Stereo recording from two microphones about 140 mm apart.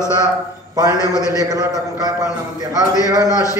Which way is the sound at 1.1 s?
25° left (ahead or behind).